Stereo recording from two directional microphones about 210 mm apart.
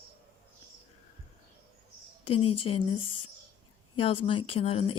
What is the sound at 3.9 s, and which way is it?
Speech, 25° left (ahead or behind).